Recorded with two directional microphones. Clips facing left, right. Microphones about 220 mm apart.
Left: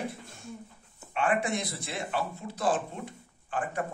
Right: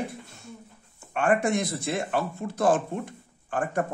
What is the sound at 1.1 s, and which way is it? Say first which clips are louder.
Speech: right 5 dB; 50° right (ahead or behind).